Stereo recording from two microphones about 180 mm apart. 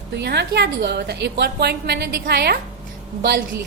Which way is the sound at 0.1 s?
70° right (ahead or behind).